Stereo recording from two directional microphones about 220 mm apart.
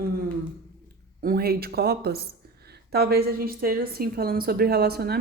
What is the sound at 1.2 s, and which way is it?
A woman's voice, 40° right (ahead or behind).